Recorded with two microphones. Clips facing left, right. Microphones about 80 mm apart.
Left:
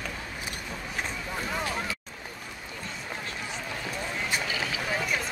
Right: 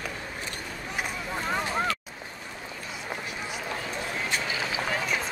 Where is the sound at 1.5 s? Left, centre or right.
Right.